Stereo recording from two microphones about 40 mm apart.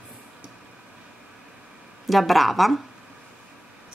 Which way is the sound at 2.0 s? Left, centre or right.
Centre.